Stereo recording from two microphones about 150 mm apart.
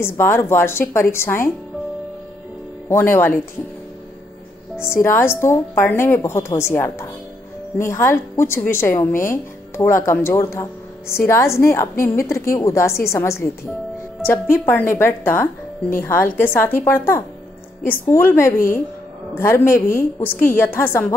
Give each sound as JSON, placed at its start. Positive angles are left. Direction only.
{"t": 0.0, "sound": "speech", "side_deg": 15}
{"t": 2.9, "sound": "speech", "side_deg": 15}
{"t": 4.7, "sound": "a woman's voice", "side_deg": 15}